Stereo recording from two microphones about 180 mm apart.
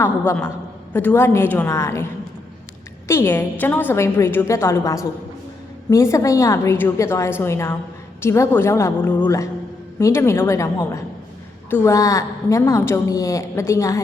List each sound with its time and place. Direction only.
0.0 s a woman's voice: 10° left (ahead or behind)
3.1 s a woman's voice: 15° left (ahead or behind)